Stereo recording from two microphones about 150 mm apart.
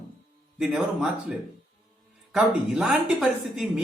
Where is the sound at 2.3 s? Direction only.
5° right (ahead or behind).